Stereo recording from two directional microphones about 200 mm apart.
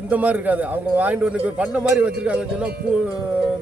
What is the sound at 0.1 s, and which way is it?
A man's voice, 10° right (ahead or behind).